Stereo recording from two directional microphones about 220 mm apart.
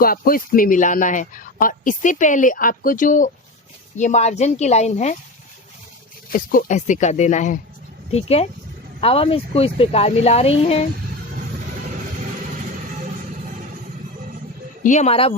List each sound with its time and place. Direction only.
0.0 s speech: 40° left (ahead or behind)
6.3 s speech: 40° left (ahead or behind)
14.8 s speech: 30° left (ahead or behind)